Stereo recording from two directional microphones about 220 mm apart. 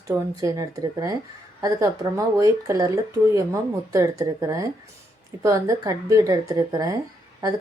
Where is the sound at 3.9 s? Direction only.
15° right (ahead or behind).